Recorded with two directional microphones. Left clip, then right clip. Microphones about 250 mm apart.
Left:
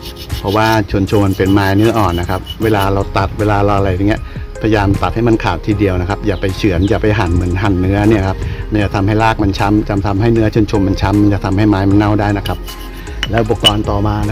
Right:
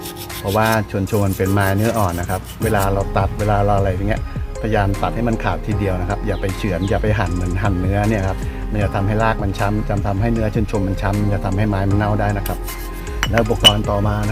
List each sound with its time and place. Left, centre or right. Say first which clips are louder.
0.6 s speech: left 5 dB; left
13.3 s speech: left 3 dB; left